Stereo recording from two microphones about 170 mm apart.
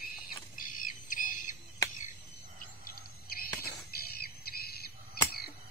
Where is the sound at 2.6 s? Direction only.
60° left (ahead or behind).